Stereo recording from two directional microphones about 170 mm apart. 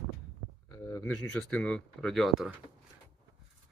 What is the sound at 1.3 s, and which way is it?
Speech, 5° left (ahead or behind).